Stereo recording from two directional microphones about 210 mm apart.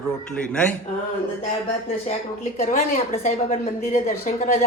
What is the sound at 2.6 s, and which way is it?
A woman's voice, 30° left (ahead or behind).